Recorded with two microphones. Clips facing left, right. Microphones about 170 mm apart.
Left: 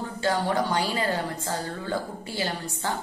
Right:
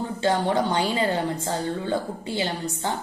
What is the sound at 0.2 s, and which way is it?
A woman's voice, 25° right (ahead or behind).